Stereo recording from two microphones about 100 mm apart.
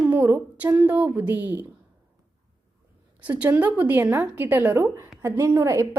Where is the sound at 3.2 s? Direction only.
15° right (ahead or behind).